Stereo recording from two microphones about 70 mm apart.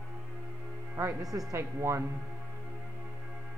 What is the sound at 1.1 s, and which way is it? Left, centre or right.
Speech, right.